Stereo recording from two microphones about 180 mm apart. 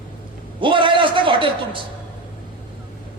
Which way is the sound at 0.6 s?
25° right (ahead or behind).